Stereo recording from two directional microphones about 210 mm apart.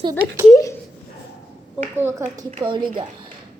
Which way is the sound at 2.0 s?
10° right (ahead or behind).